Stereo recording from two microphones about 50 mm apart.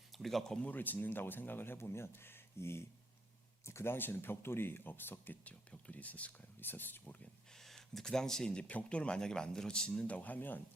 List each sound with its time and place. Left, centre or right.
0.2 s speech: centre
0.6 s speech: left
3.9 s speech: left
5.5 s speech: left
6.7 s speech: left
7.6 s speech: centre
8.6 s speech: left
10.1 s speech: left